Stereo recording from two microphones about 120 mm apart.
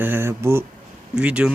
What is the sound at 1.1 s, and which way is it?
Speech, 10° right (ahead or behind).